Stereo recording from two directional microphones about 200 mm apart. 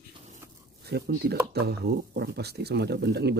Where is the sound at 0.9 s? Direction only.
50° right (ahead or behind).